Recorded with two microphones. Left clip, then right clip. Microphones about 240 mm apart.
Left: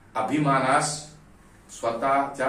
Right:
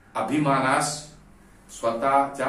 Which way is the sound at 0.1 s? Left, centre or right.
Centre.